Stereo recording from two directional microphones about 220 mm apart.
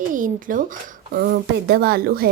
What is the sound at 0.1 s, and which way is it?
Speech, 35° right (ahead or behind).